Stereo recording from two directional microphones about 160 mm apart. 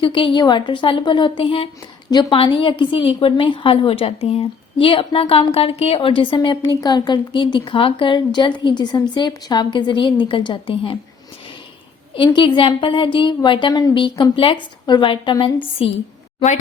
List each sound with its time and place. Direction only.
0.0 s a woman's voice: 30° left (ahead or behind)
12.1 s a woman's voice: 30° left (ahead or behind)